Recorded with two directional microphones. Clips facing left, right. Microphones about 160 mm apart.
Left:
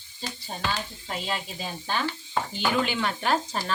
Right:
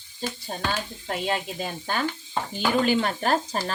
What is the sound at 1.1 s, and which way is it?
Speech, 50° right (ahead or behind).